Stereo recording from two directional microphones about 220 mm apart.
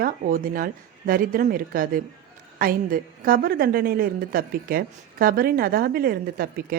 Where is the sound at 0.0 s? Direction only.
40° right (ahead or behind).